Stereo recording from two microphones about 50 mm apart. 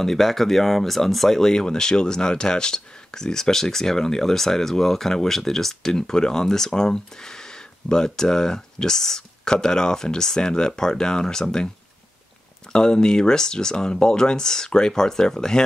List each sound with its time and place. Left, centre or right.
0.0 s speech: centre
12.7 s speech: centre